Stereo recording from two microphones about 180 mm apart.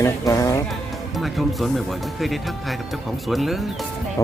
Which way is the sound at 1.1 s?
Centre (ahead or behind).